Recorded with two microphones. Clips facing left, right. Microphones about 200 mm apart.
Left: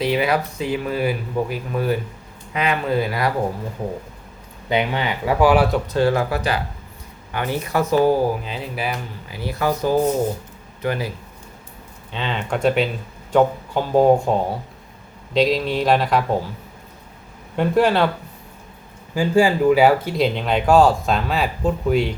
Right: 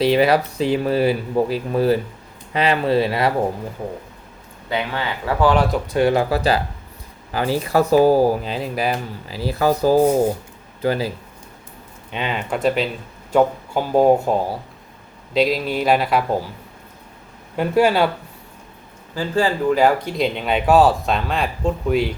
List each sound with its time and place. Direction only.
0.0 s speech: 35° right (ahead or behind)
4.7 s speech: 20° left (ahead or behind)
5.9 s speech: 20° right (ahead or behind)
12.1 s speech: 10° right (ahead or behind)
17.6 s speech: 10° right (ahead or behind)
19.1 s speech: 10° left (ahead or behind)